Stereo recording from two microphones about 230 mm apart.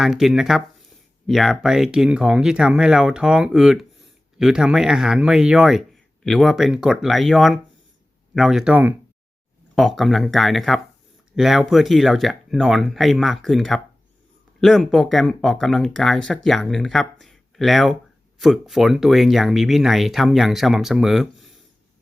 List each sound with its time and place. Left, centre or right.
0.0 s speech: centre